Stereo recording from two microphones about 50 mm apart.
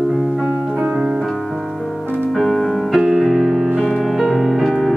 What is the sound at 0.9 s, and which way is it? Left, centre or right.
Keyboard, centre.